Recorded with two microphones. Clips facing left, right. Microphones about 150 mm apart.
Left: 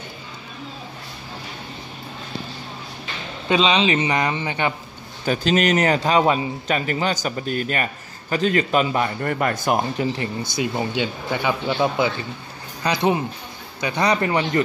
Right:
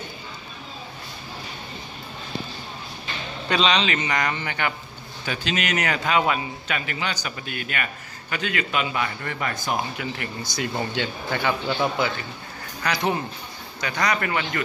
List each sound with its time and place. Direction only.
3.4 s a man's voice: 15° left (ahead or behind)
5.2 s a man's voice: 40° left (ahead or behind)
9.9 s a man's voice: 25° left (ahead or behind)
10.5 s a man's voice: 15° left (ahead or behind)